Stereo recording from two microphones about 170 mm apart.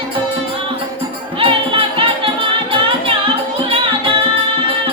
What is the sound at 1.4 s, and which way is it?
Music, 30° right (ahead or behind).